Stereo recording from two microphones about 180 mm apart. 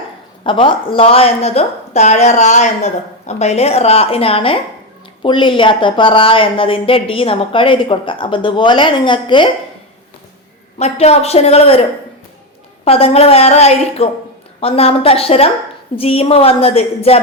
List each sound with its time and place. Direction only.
0.4 s a woman's voice: 30° left (ahead or behind)
10.8 s a woman's voice: 35° left (ahead or behind)
12.8 s a woman's voice: 35° left (ahead or behind)